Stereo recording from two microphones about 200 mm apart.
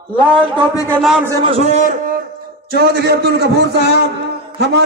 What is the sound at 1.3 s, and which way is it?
Speech, 15° right (ahead or behind).